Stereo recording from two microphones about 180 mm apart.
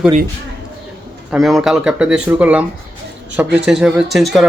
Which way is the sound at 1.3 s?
5° right (ahead or behind).